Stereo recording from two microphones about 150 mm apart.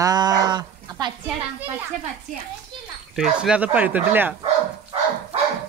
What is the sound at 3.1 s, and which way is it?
Speech, 5° right (ahead or behind).